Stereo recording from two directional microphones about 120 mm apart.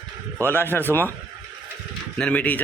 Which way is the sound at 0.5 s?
15° left (ahead or behind).